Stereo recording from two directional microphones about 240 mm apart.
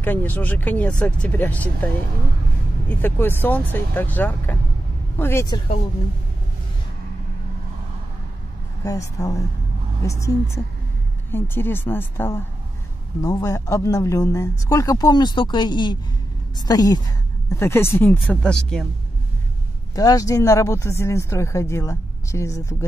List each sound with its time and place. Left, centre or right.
0.0 s speech: centre
2.9 s speech: centre
8.8 s speech: centre
20.0 s speech: centre